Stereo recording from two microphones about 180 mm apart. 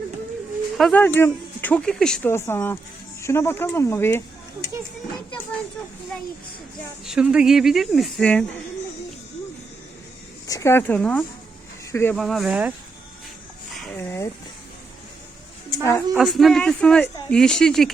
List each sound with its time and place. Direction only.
0.8 s speech: 5° left (ahead or behind)
7.0 s speech: 5° right (ahead or behind)
10.4 s speech: 15° left (ahead or behind)
12.1 s speech: centre (ahead or behind)
13.9 s speech: 15° left (ahead or behind)
15.8 s speech: 15° left (ahead or behind)
16.1 s speech: centre (ahead or behind)